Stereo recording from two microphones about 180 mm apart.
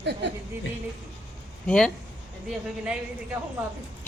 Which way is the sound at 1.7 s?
5° left (ahead or behind).